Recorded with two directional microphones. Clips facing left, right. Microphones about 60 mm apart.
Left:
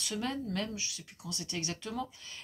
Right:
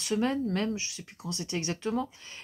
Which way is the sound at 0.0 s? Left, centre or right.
Right.